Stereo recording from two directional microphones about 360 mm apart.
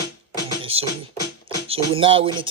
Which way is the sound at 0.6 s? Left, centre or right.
Centre.